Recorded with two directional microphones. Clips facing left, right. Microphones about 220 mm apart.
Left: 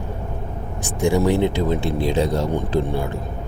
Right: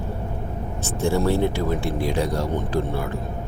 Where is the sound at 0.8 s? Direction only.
15° left (ahead or behind).